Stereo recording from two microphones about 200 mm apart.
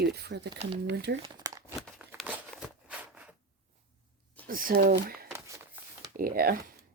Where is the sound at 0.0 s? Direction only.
55° right (ahead or behind).